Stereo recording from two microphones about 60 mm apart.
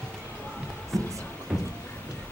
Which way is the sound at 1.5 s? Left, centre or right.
Centre.